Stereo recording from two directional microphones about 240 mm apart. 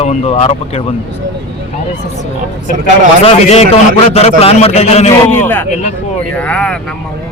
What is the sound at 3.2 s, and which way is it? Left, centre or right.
Speech, left.